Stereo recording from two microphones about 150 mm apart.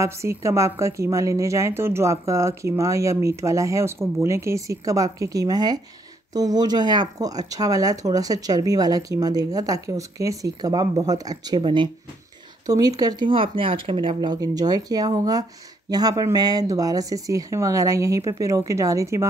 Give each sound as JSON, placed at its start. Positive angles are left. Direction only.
{"t": 0.0, "sound": "a woman's voice", "side_deg": -20}